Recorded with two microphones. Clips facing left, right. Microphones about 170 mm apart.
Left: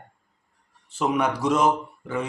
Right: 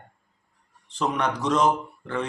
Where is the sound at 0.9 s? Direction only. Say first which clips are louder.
Left 2 dB; 10° left (ahead or behind).